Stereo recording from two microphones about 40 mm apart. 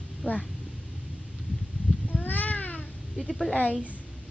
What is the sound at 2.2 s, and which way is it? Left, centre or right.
Cat, left.